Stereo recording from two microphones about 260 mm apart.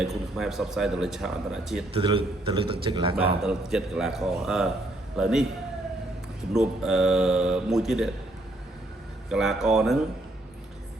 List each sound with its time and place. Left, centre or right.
0.0 s speech: centre
1.9 s a man's voice: centre
3.4 s speech: centre
6.5 s speech: centre
9.3 s speech: centre